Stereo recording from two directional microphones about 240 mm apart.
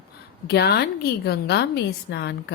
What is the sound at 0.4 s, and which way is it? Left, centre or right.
A woman's voice, left.